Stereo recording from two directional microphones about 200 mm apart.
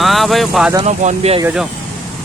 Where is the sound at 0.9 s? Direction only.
35° right (ahead or behind).